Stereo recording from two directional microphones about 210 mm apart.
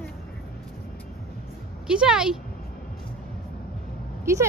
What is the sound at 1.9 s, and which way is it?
Speech, 5° right (ahead or behind).